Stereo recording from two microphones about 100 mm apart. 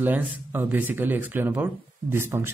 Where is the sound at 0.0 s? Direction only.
20° right (ahead or behind).